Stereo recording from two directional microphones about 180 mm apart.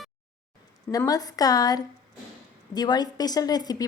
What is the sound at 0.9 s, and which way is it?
A woman's voice, 20° left (ahead or behind).